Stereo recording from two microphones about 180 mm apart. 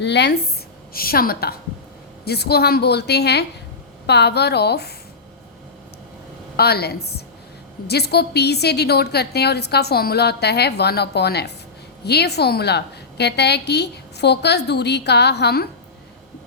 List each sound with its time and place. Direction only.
0.0 s a woman's voice: 70° left (ahead or behind)
0.9 s a woman's voice: 55° left (ahead or behind)
6.6 s a woman's voice: 60° left (ahead or behind)